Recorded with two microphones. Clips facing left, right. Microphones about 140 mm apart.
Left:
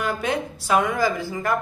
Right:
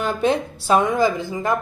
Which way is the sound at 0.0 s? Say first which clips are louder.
Right 4 dB; 30° right (ahead or behind).